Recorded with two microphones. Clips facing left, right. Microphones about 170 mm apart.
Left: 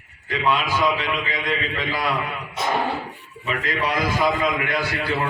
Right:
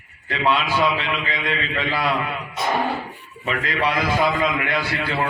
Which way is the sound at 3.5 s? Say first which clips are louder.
Right 1 dB; 45° left (ahead or behind).